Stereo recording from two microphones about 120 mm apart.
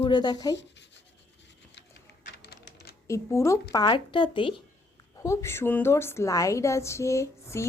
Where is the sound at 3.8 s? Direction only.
40° left (ahead or behind).